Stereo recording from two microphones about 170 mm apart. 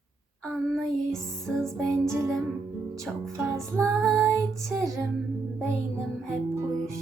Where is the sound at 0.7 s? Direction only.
5° left (ahead or behind).